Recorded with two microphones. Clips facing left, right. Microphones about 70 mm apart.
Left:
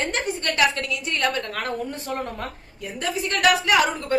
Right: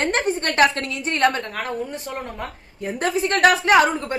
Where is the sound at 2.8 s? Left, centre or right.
Right.